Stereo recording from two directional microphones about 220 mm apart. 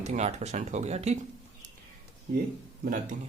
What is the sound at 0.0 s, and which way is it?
Speech, 30° right (ahead or behind).